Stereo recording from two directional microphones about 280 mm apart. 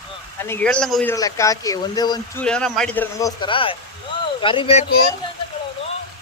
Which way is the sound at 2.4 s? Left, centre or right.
Centre.